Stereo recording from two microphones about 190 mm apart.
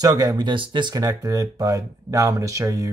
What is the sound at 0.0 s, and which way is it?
Speech, 20° right (ahead or behind).